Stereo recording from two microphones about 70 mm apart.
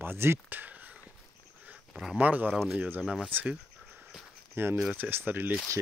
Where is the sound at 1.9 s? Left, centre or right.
Centre.